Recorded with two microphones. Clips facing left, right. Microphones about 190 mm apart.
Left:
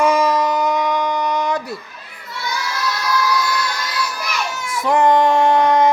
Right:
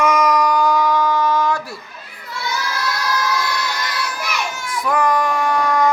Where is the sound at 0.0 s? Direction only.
30° left (ahead or behind).